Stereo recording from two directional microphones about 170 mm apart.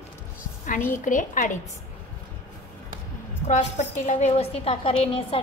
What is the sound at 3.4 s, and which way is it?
A woman's voice, 45° left (ahead or behind).